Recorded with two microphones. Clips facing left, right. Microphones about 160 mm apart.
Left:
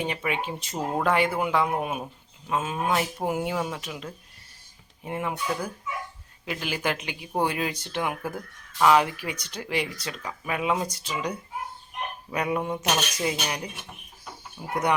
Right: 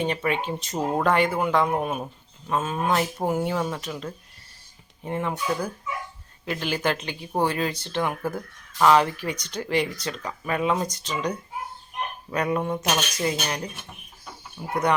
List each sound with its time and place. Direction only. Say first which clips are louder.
0.1 s speech: right 3 dB; 5° left (ahead or behind)